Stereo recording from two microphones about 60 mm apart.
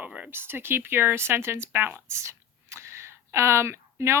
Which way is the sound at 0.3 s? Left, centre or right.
Right.